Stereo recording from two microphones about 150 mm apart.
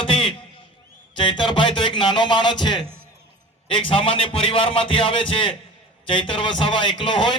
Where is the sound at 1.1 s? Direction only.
35° left (ahead or behind).